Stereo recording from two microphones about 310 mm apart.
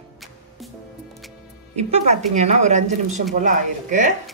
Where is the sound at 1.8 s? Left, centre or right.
Right.